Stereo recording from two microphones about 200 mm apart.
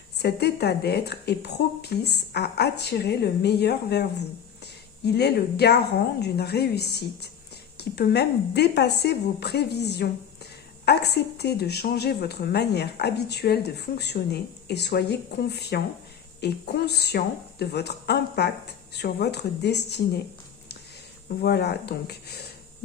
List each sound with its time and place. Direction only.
0.2 s a woman's voice: 55° left (ahead or behind)
21.4 s speech: 55° left (ahead or behind)